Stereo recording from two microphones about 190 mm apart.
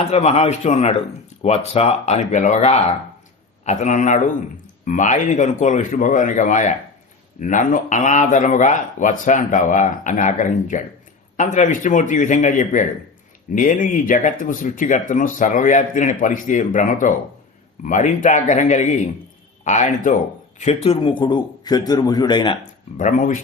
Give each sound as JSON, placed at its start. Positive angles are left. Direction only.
{"t": 0.1, "sound": "a man's voice", "side_deg": 35}
{"t": 23.0, "sound": "speech", "side_deg": 40}